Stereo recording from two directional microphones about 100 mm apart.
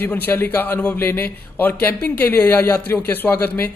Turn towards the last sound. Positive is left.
turn(degrees=20)  # may be behind; listen again after turning